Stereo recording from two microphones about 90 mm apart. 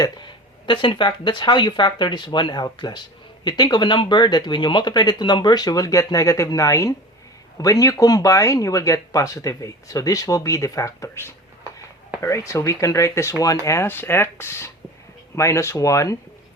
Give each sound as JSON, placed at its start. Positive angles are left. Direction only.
{"t": 0.0, "sound": "speech", "side_deg": 60}